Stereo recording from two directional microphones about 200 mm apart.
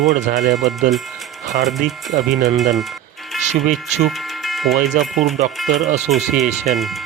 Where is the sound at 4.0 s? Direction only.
Centre (ahead or behind).